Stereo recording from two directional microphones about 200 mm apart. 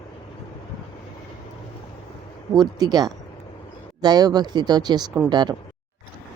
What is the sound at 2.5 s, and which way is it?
Speech, 20° right (ahead or behind).